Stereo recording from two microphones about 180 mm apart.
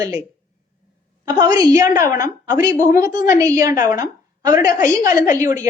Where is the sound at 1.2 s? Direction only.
20° right (ahead or behind).